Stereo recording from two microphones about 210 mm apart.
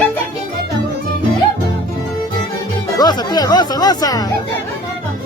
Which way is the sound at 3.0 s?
20° left (ahead or behind).